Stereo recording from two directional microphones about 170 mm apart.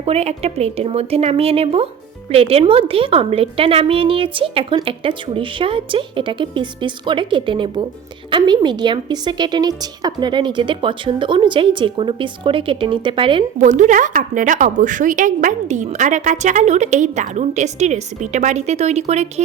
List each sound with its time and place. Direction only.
0.0 s a woman's voice: 40° right (ahead or behind)
13.6 s a woman's voice: 45° right (ahead or behind)